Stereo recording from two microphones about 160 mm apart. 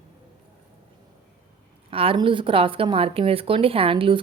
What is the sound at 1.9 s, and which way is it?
A woman's voice, 35° right (ahead or behind).